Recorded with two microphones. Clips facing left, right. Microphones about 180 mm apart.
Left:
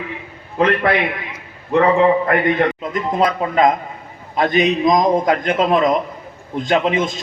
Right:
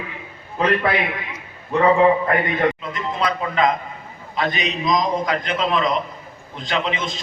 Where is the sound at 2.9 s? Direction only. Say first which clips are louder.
Left 6 dB; 50° left (ahead or behind).